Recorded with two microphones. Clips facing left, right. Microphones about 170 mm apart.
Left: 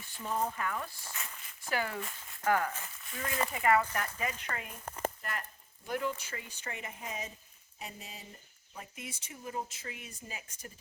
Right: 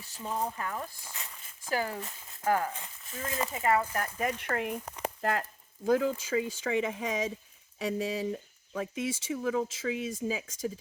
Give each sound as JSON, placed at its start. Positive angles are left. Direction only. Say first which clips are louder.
{"t": 0.6, "sound": "speech", "louder": "even", "side_deg": -30}
{"t": 1.0, "sound": "zipper", "louder": "even", "side_deg": -20}
{"t": 1.7, "sound": "speech", "louder": "right 3 dB", "side_deg": -35}
{"t": 2.0, "sound": "speech", "louder": "even", "side_deg": -20}
{"t": 4.3, "sound": "speech", "louder": "right 9 dB", "side_deg": -65}
{"t": 4.9, "sound": "a sound", "louder": "even", "side_deg": 0}
{"t": 5.2, "sound": "speech", "louder": "right 10 dB", "side_deg": -90}